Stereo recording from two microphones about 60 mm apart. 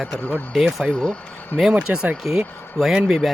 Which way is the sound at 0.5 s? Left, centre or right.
Centre.